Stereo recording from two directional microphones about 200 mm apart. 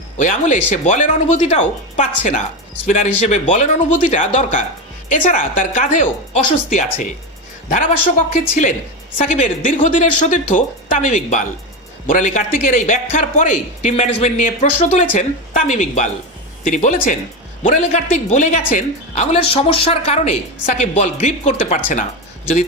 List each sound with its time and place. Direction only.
0.2 s a man's voice: 40° left (ahead or behind)